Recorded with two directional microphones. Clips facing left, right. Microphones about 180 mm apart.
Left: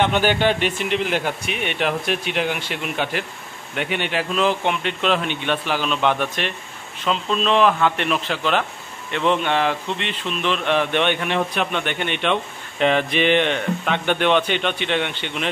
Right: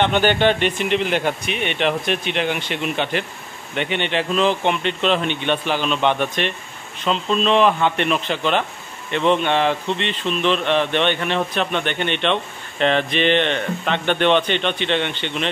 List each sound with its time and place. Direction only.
0.0 s speech: 5° left (ahead or behind)